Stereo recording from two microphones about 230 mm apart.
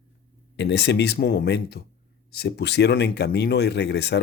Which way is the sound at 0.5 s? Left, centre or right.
Left.